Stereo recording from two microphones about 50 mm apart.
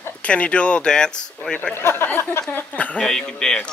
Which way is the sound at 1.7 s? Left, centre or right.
Left.